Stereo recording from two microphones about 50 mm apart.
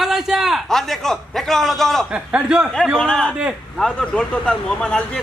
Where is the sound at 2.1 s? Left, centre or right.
Right.